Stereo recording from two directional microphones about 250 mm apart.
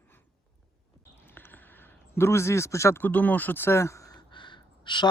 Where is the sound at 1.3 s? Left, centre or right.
Centre.